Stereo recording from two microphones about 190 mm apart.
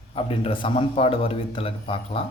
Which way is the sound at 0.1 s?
30° left (ahead or behind).